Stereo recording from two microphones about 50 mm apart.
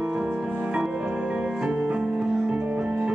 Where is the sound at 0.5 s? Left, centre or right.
Right.